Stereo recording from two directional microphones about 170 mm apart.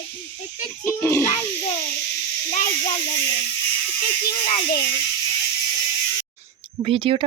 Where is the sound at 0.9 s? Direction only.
15° left (ahead or behind).